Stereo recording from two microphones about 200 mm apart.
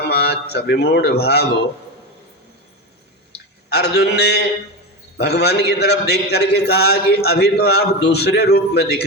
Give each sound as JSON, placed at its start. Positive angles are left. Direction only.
{"t": 0.1, "sound": "a man's voice", "side_deg": 55}
{"t": 3.3, "sound": "a man's voice", "side_deg": 55}